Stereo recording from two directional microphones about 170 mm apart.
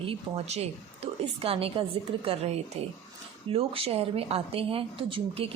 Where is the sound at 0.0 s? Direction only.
35° right (ahead or behind).